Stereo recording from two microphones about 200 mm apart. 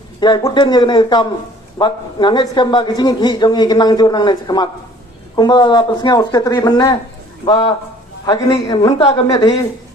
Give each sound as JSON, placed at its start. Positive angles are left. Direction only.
{"t": 0.2, "sound": "a man's voice", "side_deg": 20}